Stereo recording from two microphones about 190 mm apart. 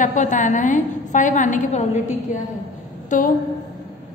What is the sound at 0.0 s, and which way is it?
A woman's voice, 40° left (ahead or behind).